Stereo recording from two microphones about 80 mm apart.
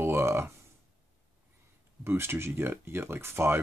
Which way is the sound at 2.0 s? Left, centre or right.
Right.